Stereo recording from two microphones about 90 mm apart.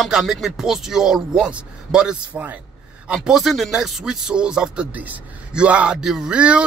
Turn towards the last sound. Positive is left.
turn(degrees=-10)  # may be behind; listen again after turning